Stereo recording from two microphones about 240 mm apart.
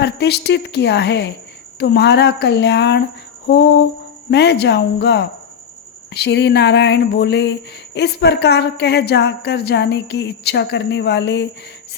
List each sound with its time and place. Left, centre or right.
0.0 s a woman's voice: left